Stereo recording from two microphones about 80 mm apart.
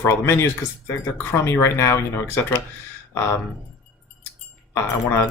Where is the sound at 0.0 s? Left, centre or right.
Left.